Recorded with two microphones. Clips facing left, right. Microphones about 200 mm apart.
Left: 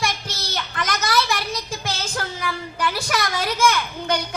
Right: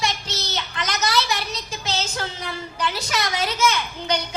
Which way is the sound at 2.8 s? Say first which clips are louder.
Left 2 dB; 25° right (ahead or behind).